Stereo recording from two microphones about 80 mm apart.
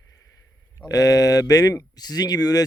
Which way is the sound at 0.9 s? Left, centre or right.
Left.